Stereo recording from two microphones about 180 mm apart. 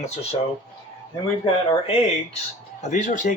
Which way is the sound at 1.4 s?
35° left (ahead or behind).